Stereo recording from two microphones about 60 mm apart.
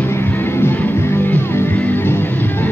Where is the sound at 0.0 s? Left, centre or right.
Left.